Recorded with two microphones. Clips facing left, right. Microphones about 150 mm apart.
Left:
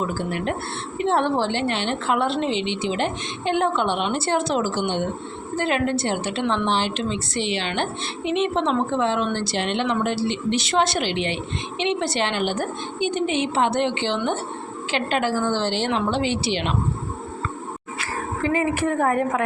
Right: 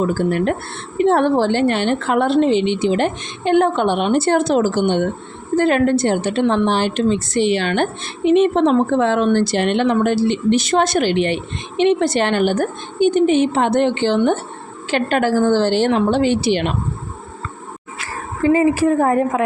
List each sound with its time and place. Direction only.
0.0 s a woman's voice: 45° right (ahead or behind)
18.5 s a woman's voice: 30° right (ahead or behind)